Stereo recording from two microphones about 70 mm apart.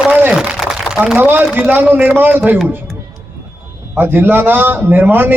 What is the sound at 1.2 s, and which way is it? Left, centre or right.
A man's voice, right.